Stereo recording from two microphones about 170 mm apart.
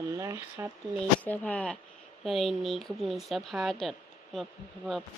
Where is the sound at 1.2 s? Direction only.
10° left (ahead or behind).